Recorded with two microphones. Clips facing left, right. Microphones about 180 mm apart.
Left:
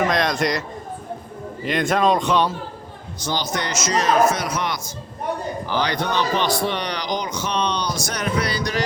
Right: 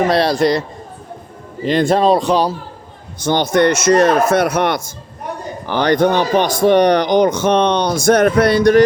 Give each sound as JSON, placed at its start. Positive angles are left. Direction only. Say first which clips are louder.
{"t": 0.1, "sound": "speech", "louder": "right 7 dB", "side_deg": -35}
{"t": 1.6, "sound": "speech", "louder": "right 6 dB", "side_deg": -30}
{"t": 3.2, "sound": "a man's voice", "louder": "right 12 dB", "side_deg": -55}